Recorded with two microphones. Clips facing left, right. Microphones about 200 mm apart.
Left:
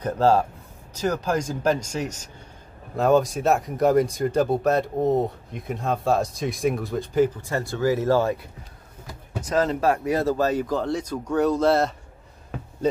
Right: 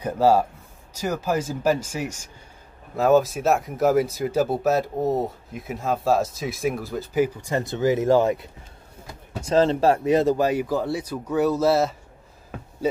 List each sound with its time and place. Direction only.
0.0 s speech: 10° right (ahead or behind)
7.4 s speech: 20° right (ahead or behind)